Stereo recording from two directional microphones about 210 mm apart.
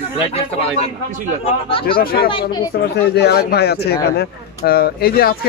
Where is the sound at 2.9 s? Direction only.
50° left (ahead or behind).